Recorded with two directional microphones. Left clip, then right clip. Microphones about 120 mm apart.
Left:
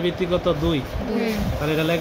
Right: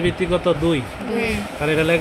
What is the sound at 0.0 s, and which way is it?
Speech, 35° right (ahead or behind).